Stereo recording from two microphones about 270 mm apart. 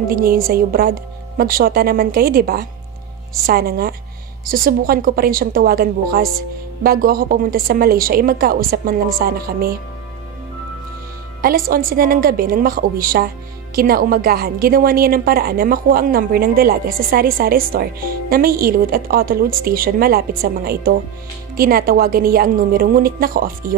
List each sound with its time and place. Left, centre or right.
0.1 s a woman's voice: right
11.4 s a woman's voice: right